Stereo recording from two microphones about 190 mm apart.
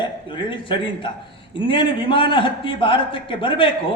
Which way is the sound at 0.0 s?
25° left (ahead or behind).